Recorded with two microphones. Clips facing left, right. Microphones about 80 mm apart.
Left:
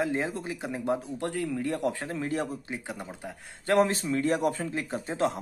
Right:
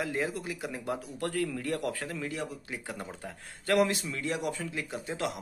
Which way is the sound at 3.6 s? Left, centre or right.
Left.